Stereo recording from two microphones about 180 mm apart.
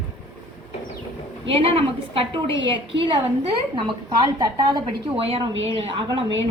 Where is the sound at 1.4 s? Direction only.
30° right (ahead or behind).